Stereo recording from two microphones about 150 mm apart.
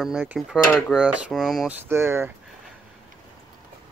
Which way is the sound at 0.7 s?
Centre (ahead or behind).